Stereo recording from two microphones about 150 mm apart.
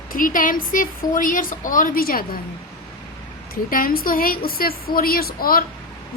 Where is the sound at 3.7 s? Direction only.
70° left (ahead or behind).